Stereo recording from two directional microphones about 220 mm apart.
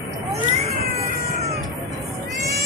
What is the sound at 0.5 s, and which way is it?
Vehicle, 30° right (ahead or behind).